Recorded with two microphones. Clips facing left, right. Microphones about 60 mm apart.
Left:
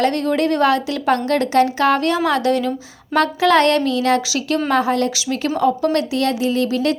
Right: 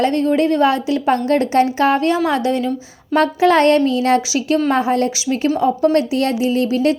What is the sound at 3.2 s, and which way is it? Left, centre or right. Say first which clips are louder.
A woman's voice: right 1 dB; right.